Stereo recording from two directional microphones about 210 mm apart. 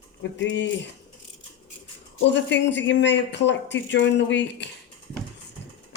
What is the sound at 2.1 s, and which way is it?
Speech, 60° left (ahead or behind).